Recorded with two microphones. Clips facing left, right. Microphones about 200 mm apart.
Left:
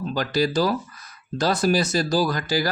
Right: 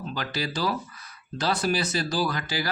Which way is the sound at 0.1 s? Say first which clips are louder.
Left 9 dB; 40° left (ahead or behind).